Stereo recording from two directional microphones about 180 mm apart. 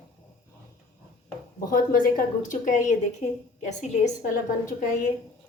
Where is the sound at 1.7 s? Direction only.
50° left (ahead or behind).